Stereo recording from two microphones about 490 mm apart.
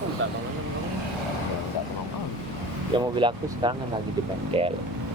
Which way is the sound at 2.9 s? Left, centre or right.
Centre.